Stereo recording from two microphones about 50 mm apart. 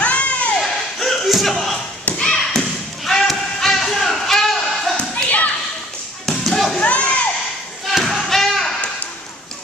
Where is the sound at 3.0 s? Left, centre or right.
Centre.